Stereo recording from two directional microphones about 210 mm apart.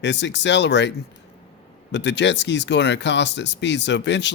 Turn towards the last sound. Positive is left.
turn(degrees=55)  # may be behind; listen again after turning